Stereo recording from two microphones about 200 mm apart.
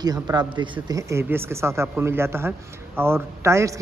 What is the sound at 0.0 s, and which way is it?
A man's voice, 20° right (ahead or behind).